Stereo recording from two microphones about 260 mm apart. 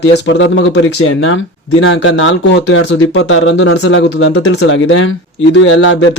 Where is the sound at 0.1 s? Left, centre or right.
Left.